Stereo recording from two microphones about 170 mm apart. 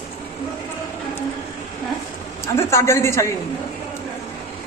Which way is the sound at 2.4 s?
15° left (ahead or behind).